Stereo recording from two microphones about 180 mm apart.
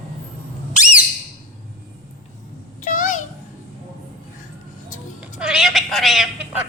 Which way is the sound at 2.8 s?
45° left (ahead or behind).